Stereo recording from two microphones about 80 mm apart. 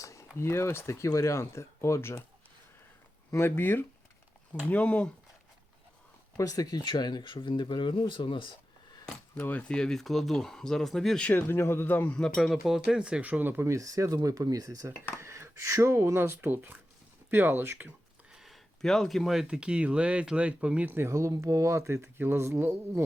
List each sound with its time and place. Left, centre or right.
0.0 s a sound: left
0.3 s speech: left
3.3 s speech: left
6.3 s speech: left
9.3 s speech: left
9.6 s speech: centre
11.2 s speech: left
12.1 s speech: centre; by 13.7 s right
13.7 s speech: right
18.3 s speech: centre; by 21.1 s right
21.1 s speech: right